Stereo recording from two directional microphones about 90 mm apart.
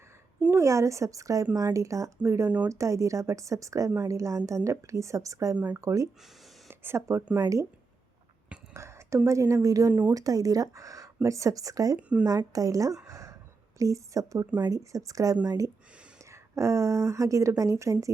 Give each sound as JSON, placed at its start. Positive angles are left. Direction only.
{"t": 0.5, "sound": "a woman's voice", "side_deg": -35}
{"t": 7.3, "sound": "a woman's voice", "side_deg": -35}
{"t": 8.7, "sound": "a woman's voice", "side_deg": -30}
{"t": 9.9, "sound": "speech", "side_deg": -20}
{"t": 10.2, "sound": "a woman's voice", "side_deg": -40}
{"t": 11.9, "sound": "speech", "side_deg": -15}
{"t": 12.2, "sound": "a woman's voice", "side_deg": -40}
{"t": 13.1, "sound": "a sound", "side_deg": -35}
{"t": 13.7, "sound": "a woman's voice", "side_deg": -35}